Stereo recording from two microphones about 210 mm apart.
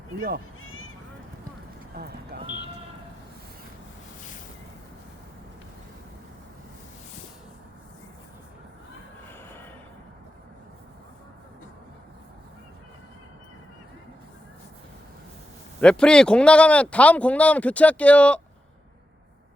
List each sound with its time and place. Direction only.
2.0 s speech: 45° right (ahead or behind)
9.4 s a sound: 10° left (ahead or behind)
15.8 s speech: 5° left (ahead or behind)